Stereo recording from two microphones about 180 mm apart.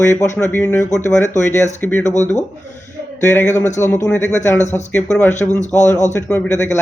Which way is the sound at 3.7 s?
15° left (ahead or behind).